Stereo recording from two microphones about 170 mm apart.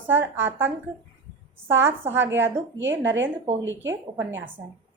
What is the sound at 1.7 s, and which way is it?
Speech, 15° right (ahead or behind).